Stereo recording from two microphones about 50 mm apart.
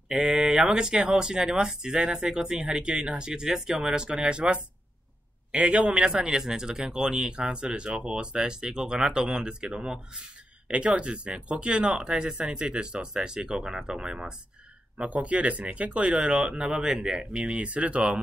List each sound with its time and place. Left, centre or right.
0.1 s speech: right
0.5 s speech: centre
15.0 s speech: right